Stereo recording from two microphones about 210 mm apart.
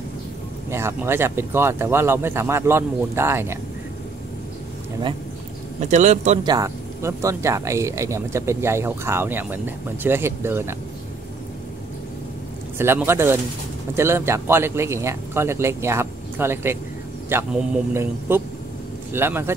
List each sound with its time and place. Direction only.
0.7 s speech: 10° right (ahead or behind)
5.8 s a man's voice: 35° right (ahead or behind)
6.4 s speech: 15° right (ahead or behind)
12.7 s speech: 10° right (ahead or behind)